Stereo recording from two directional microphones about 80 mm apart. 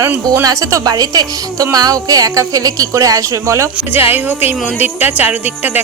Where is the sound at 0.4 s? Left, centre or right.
Right.